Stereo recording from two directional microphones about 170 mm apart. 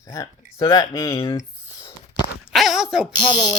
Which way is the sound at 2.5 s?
Centre (ahead or behind).